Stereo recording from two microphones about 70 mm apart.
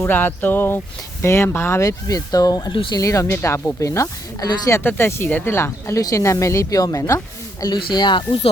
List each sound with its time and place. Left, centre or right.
0.1 s a sound: left
1.2 s speech: left
1.8 s speech: left
3.0 s speech: left
4.8 s speech: left
6.0 s speech: left
7.6 s speech: left